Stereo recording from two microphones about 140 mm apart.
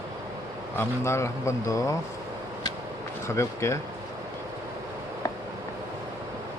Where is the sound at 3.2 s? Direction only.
20° left (ahead or behind).